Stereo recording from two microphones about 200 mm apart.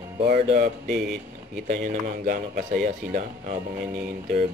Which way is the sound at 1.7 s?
45° right (ahead or behind).